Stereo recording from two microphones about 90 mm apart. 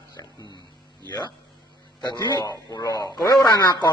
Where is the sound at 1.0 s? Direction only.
50° left (ahead or behind).